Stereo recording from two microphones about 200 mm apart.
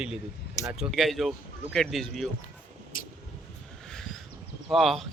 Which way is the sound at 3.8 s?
5° left (ahead or behind).